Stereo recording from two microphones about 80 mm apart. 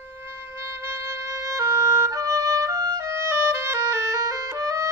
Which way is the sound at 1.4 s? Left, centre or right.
Right.